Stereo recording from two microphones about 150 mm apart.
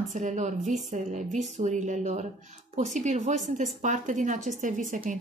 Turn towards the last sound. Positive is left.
turn(degrees=-60)  # may be behind; listen again after turning